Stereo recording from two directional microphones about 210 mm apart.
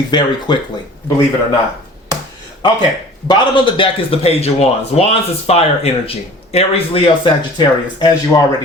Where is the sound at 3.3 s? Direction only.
25° left (ahead or behind).